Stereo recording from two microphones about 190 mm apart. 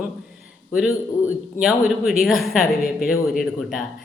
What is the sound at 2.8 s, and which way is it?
Speech, 50° left (ahead or behind).